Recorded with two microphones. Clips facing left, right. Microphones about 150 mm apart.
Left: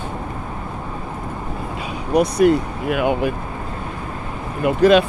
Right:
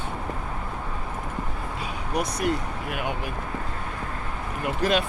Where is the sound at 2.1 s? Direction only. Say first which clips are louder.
Left 12 dB; 70° left (ahead or behind); by 3.3 s 90° left.